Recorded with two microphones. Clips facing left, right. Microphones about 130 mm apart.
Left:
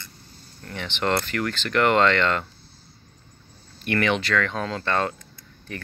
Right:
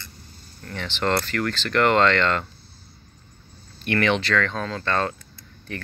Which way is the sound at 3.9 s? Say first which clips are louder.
Right 1 dB; 5° left (ahead or behind).